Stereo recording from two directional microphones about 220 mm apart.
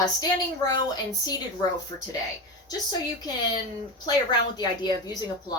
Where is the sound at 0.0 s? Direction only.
15° left (ahead or behind).